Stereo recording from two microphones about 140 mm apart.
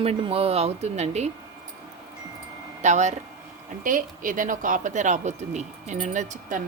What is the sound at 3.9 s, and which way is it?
Speech, 70° right (ahead or behind).